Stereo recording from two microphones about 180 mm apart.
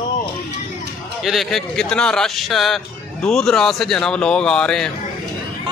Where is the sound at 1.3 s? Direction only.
Centre (ahead or behind).